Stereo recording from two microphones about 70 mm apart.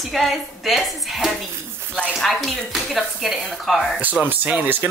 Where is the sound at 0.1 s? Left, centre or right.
Centre.